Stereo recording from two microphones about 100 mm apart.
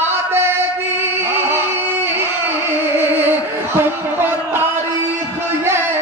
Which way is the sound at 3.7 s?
20° right (ahead or behind).